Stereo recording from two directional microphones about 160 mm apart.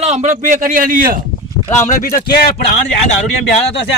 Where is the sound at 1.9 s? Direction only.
60° left (ahead or behind).